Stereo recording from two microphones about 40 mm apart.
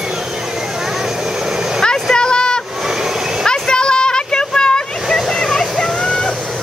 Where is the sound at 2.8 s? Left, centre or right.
Centre.